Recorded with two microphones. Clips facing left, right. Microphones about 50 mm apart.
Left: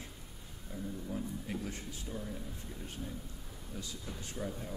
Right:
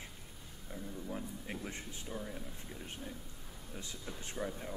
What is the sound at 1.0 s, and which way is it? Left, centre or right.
Speech, centre.